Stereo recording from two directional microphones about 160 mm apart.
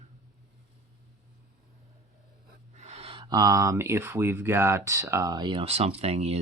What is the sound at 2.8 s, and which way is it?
Speech, 40° right (ahead or behind).